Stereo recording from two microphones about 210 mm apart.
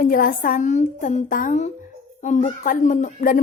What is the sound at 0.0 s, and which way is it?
Speech, 40° left (ahead or behind).